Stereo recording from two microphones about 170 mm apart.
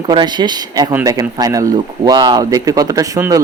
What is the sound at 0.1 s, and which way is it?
Speech, 25° right (ahead or behind).